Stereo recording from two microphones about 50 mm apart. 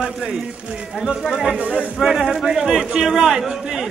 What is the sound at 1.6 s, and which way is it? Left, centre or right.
Speech, right.